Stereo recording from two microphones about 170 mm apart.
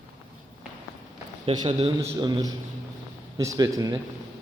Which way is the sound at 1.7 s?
35° right (ahead or behind).